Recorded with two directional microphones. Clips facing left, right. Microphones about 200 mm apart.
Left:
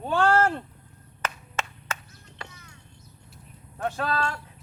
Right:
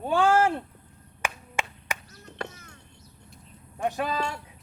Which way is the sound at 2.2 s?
50° right (ahead or behind).